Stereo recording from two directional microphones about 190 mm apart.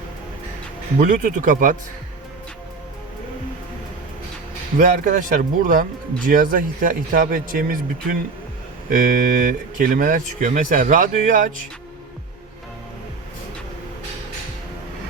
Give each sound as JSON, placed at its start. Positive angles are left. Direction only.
{"t": 0.9, "sound": "speech", "side_deg": -40}
{"t": 4.8, "sound": "speech", "side_deg": -45}